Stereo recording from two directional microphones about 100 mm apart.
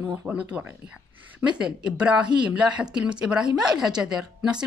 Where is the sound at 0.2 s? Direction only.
10° right (ahead or behind).